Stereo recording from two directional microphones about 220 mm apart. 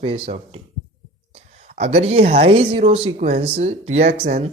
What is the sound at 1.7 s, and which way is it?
Speech, 30° right (ahead or behind).